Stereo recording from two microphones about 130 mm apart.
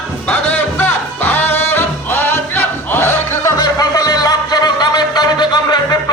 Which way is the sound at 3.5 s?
30° left (ahead or behind).